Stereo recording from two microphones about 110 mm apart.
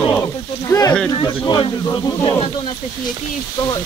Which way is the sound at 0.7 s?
30° left (ahead or behind).